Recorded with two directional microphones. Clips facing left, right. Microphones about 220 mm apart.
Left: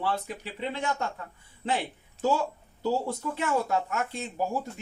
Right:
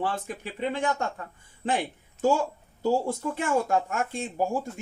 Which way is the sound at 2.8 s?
50° right (ahead or behind).